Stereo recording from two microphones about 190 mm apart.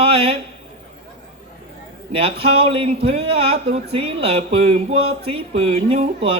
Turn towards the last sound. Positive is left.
turn(degrees=-30)  # may be behind; listen again after turning